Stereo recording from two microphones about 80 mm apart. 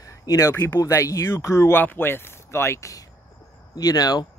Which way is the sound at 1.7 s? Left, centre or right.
Left.